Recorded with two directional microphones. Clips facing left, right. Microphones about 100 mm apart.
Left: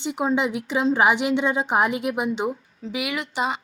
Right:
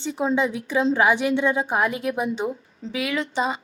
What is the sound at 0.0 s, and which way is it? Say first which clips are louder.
A woman's voice: even; 15° left (ahead or behind).